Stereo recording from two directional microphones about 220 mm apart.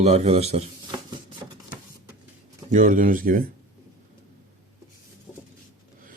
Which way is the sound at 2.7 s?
35° right (ahead or behind).